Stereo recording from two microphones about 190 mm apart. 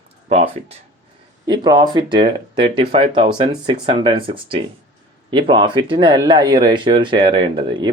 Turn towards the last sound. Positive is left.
turn(degrees=-25)  # may be behind; listen again after turning